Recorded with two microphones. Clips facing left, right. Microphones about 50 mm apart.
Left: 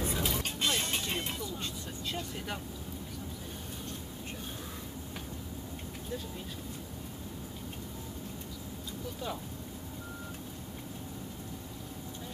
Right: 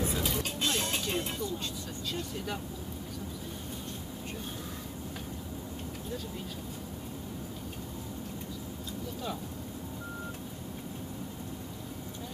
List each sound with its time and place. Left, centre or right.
0.0 s vehicle: left